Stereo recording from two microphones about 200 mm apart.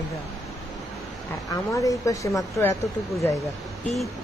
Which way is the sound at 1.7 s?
15° left (ahead or behind).